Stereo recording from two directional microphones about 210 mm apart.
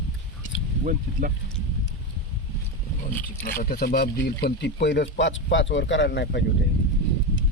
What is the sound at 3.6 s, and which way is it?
Speech, 45° left (ahead or behind).